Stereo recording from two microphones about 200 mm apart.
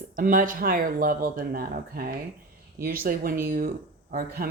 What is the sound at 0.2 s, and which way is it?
Speech, 45° right (ahead or behind).